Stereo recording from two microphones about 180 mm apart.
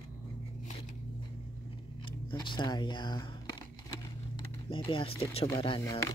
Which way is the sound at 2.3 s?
25° left (ahead or behind).